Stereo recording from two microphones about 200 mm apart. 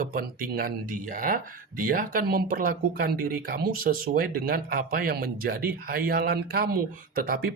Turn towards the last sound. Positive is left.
turn(degrees=-45)  # may be behind; listen again after turning